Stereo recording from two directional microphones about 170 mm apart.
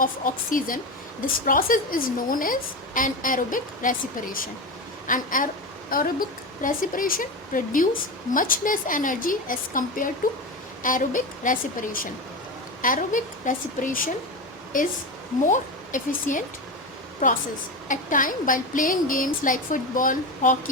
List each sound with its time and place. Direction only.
0.0 s a woman's voice: 55° left (ahead or behind)
15.4 s a woman's voice: 50° left (ahead or behind)
17.8 s a woman's voice: 50° left (ahead or behind)